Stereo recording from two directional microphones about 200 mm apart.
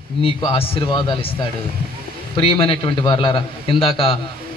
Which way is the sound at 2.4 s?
25° left (ahead or behind).